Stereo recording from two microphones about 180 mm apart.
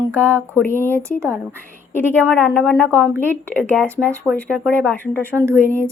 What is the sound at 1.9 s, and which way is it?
Speech, 10° left (ahead or behind).